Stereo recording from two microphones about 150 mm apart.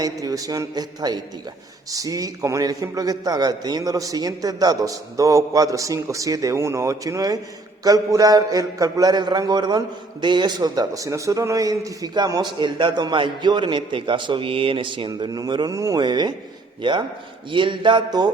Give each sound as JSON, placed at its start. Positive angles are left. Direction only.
{"t": 0.0, "sound": "a man's voice", "side_deg": -25}